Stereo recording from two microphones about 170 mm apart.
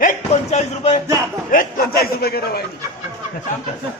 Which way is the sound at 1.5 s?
60° left (ahead or behind).